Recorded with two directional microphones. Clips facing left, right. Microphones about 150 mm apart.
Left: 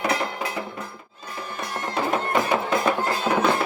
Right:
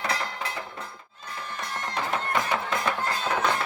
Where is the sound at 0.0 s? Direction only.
25° left (ahead or behind).